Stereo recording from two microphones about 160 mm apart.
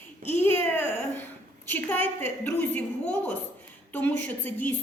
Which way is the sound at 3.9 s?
10° left (ahead or behind).